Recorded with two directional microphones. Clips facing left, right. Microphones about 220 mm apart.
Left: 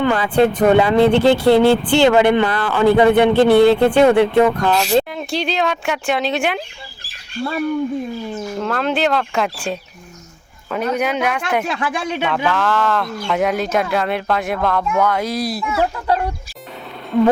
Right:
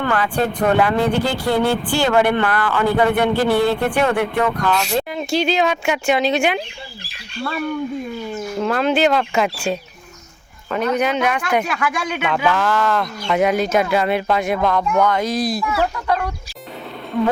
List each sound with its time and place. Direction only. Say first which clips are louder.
0.0 s speech: left 5 dB; 20° left (ahead or behind)
5.1 s speech: right 3 dB; centre (ahead or behind)
8.5 s speech: right 3 dB; 5° right (ahead or behind)
11.6 s speech: left 1 dB; 30° left (ahead or behind)
12.2 s speech: right 1 dB; 5° right (ahead or behind)
15.6 s speech: left 1 dB; 25° left (ahead or behind)